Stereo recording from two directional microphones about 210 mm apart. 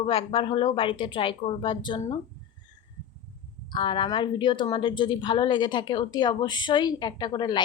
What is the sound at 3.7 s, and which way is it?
A woman's voice, 25° left (ahead or behind).